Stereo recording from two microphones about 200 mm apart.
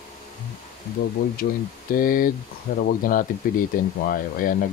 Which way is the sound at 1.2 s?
45° left (ahead or behind).